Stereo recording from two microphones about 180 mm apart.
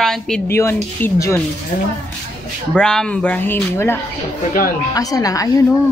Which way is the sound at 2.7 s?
5° left (ahead or behind).